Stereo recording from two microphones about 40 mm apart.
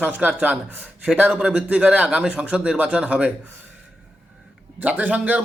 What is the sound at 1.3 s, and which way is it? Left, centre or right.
Speech, right.